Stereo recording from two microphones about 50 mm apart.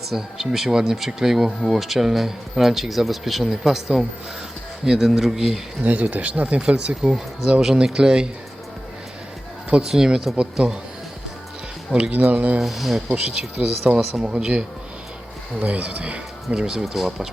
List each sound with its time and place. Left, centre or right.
0.1 s speech: centre
5.8 s speech: right
7.6 s speech: centre
9.8 s speech: centre
10.3 s speech: right
11.9 s speech: centre
12.1 s speech: right
12.5 s speech: centre
13.2 s speech: right
14.0 s speech: centre
14.3 s speech: centre
15.5 s speech: right
16.6 s speech: centre